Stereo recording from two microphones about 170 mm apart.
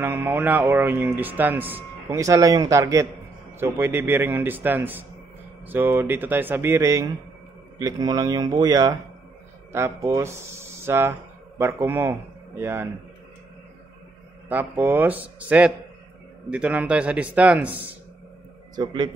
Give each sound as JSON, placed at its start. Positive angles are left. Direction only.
{"t": 0.0, "sound": "speech", "side_deg": -10}
{"t": 14.5, "sound": "speech", "side_deg": -10}